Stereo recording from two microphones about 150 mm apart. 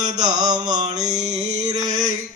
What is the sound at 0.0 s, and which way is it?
Speech, 25° right (ahead or behind).